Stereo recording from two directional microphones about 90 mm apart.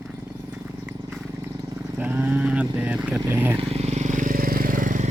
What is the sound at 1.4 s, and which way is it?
Vehicle, 30° right (ahead or behind).